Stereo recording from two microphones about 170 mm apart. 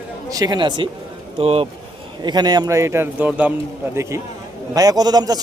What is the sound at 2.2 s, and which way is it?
A man's voice, 25° right (ahead or behind).